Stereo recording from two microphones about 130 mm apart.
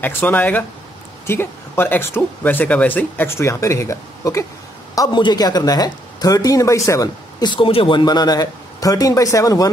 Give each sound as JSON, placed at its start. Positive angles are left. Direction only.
{"t": 0.0, "sound": "speech", "side_deg": 15}